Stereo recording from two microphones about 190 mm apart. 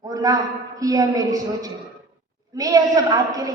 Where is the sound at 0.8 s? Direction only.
20° right (ahead or behind).